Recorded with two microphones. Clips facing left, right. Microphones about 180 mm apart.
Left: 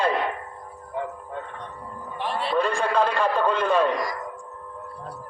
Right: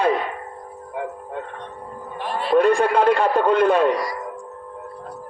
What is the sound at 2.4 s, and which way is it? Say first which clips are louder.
A man's voice: right 9 dB; 60° right (ahead or behind).